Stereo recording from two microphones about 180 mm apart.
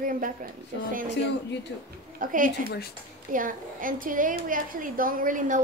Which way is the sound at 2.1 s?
50° right (ahead or behind).